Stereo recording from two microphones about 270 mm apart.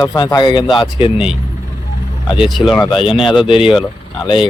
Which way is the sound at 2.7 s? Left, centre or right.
Centre.